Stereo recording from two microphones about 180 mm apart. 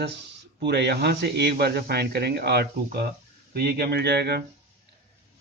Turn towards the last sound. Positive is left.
turn(degrees=-65)  # may be behind; listen again after turning